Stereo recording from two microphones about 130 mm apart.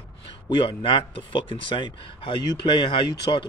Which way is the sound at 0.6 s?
40° left (ahead or behind).